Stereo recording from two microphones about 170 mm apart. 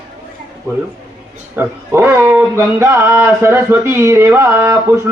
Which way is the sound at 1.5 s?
15° right (ahead or behind).